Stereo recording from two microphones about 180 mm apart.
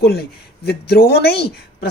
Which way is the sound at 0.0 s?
65° left (ahead or behind).